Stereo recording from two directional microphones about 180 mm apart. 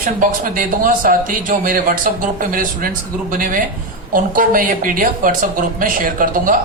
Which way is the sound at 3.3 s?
50° right (ahead or behind).